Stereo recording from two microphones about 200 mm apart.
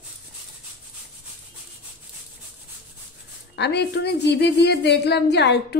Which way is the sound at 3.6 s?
60° left (ahead or behind).